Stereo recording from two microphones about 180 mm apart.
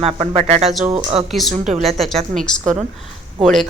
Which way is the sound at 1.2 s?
Centre (ahead or behind).